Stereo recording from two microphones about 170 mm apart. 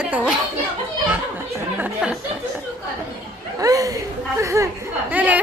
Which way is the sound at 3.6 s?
20° right (ahead or behind).